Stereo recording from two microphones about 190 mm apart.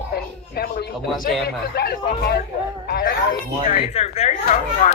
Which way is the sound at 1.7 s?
55° left (ahead or behind).